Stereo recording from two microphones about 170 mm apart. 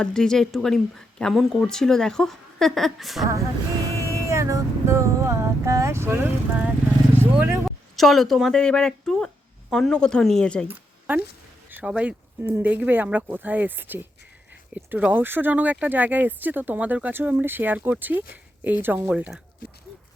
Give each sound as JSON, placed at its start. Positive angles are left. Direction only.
{"t": 0.0, "sound": "speech", "side_deg": 5}
{"t": 4.0, "sound": "vehicle", "side_deg": -15}
{"t": 7.6, "sound": "speech", "side_deg": 0}
{"t": 10.7, "sound": "a sound", "side_deg": -10}
{"t": 11.7, "sound": "speech", "side_deg": -10}